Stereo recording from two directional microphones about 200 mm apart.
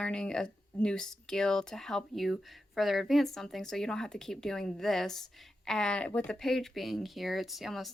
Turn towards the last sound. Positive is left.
turn(degrees=0)  # may be behind; listen again after turning